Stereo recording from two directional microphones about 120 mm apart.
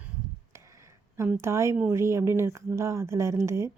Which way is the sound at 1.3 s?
20° right (ahead or behind).